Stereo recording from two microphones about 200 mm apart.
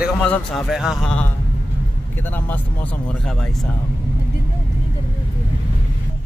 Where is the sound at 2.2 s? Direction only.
10° left (ahead or behind).